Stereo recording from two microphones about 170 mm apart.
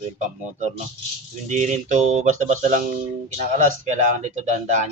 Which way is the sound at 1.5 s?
45° right (ahead or behind).